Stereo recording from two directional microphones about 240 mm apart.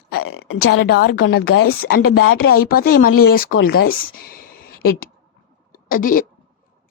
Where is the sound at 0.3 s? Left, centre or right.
Left.